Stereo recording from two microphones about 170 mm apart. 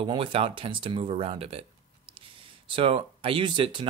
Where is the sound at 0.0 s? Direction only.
30° right (ahead or behind).